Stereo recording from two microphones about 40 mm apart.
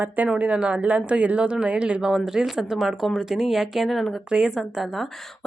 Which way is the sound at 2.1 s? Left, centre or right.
Centre.